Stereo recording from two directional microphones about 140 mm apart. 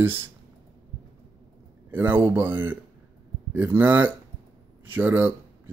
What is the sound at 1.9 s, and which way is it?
Speech, 15° right (ahead or behind).